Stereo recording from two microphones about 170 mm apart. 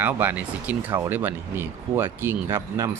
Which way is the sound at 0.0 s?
10° right (ahead or behind).